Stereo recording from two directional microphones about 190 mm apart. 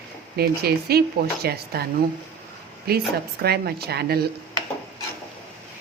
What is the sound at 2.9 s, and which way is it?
A woman's voice, 55° right (ahead or behind).